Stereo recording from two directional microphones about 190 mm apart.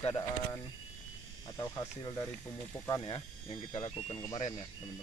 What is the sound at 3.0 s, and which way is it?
Speech, 30° left (ahead or behind).